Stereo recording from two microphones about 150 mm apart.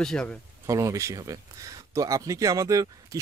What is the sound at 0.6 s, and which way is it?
Speech, 20° right (ahead or behind).